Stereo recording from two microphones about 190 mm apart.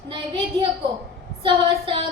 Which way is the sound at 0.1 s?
25° right (ahead or behind).